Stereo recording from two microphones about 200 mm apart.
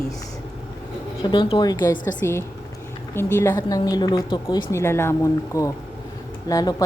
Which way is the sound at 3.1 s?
10° left (ahead or behind).